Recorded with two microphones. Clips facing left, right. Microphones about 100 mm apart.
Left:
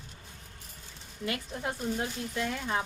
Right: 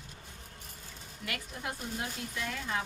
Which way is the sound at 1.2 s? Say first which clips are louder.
Left 5 dB; 30° left (ahead or behind).